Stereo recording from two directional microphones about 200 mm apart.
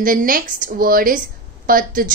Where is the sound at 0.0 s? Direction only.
45° right (ahead or behind).